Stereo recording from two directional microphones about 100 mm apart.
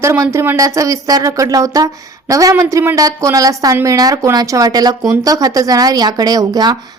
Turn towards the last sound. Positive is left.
turn(degrees=-40)  # may be behind; listen again after turning